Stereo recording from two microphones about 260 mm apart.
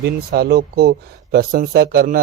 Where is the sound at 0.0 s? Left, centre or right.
Right.